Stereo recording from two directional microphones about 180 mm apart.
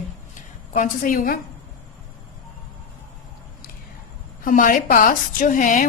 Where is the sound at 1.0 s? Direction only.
50° left (ahead or behind).